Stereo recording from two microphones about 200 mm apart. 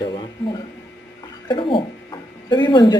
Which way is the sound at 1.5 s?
25° left (ahead or behind).